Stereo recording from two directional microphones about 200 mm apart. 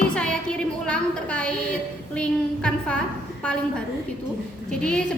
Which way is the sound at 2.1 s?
5° left (ahead or behind).